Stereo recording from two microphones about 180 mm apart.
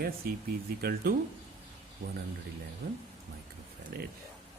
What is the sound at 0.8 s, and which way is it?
Speech, 60° right (ahead or behind).